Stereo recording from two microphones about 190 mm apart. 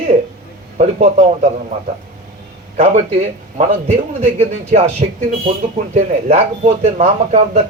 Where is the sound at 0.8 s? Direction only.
40° right (ahead or behind).